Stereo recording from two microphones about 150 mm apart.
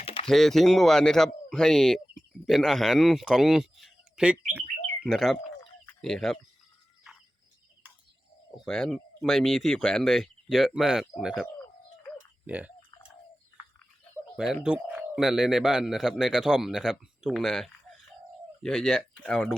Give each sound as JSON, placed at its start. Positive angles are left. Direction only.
{"t": 0.0, "sound": "a sound", "side_deg": 40}
{"t": 0.3, "sound": "speech", "side_deg": 0}
{"t": 8.6, "sound": "speech", "side_deg": 5}
{"t": 12.5, "sound": "speech", "side_deg": -10}
{"t": 14.3, "sound": "speech", "side_deg": -5}